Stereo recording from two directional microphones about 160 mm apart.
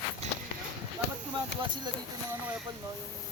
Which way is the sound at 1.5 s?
90° left.